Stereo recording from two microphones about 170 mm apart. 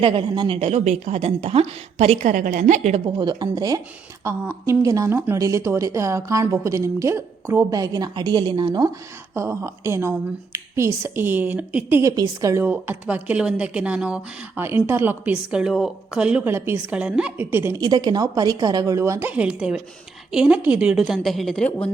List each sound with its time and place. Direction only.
0.0 s a woman's voice: 30° right (ahead or behind)
3.2 s a woman's voice: 25° right (ahead or behind); by 21.7 s 5° left (ahead or behind)